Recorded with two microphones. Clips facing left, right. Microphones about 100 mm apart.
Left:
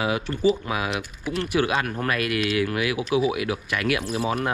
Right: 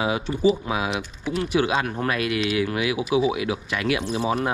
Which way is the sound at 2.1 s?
55° left (ahead or behind).